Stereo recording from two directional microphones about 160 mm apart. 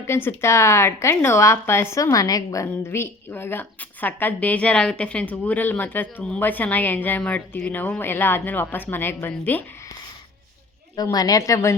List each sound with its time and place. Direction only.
0.1 s a woman's voice: 15° left (ahead or behind)
10.9 s a woman's voice: 25° left (ahead or behind)